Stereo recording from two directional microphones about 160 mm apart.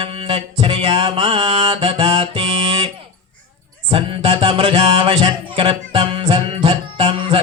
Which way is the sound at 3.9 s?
35° right (ahead or behind).